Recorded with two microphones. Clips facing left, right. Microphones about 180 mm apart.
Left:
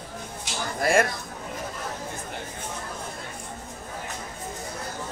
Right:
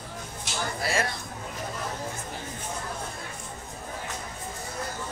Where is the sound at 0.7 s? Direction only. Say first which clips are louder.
Left 8 dB; 50° left (ahead or behind).